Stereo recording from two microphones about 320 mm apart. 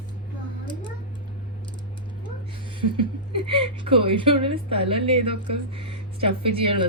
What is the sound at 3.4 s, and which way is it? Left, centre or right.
Speech, centre.